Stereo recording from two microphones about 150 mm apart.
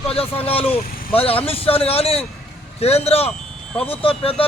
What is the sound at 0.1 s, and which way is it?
A man's voice, 40° left (ahead or behind).